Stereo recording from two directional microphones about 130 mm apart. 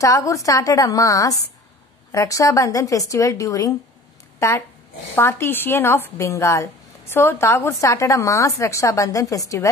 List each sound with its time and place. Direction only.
0.0 s a woman's voice: 25° left (ahead or behind)